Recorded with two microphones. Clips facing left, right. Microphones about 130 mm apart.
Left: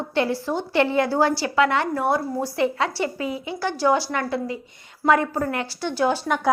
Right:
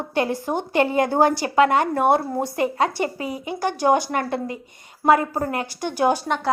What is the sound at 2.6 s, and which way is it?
A woman's voice, 45° right (ahead or behind).